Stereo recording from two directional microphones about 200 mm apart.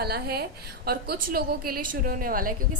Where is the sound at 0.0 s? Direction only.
50° right (ahead or behind).